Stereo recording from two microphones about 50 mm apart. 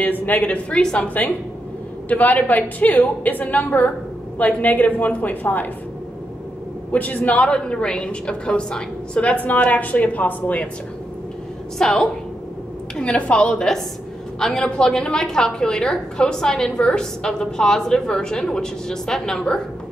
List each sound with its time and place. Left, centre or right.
0.2 s a woman's voice: left
0.7 s a woman's voice: left
1.0 s a woman's voice: left
6.9 s a woman's voice: left
11.8 s a woman's voice: centre